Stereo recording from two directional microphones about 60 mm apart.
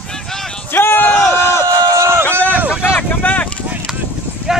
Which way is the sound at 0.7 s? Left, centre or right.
Left.